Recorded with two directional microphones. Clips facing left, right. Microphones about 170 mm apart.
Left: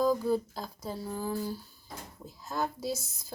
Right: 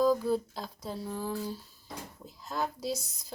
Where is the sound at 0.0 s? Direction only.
Centre (ahead or behind).